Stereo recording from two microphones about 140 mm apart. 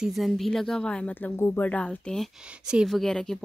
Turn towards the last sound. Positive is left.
turn(degrees=5)  # may be behind; listen again after turning